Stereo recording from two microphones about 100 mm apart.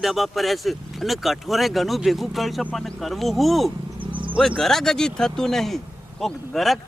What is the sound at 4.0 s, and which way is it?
Insect, 60° right (ahead or behind).